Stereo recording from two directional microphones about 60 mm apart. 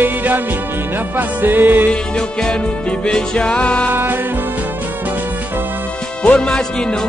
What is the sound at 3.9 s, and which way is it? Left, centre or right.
Music, right.